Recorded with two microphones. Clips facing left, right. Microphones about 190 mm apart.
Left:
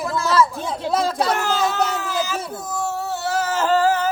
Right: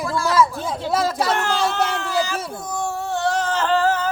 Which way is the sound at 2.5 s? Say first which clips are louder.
Even; 5° left (ahead or behind).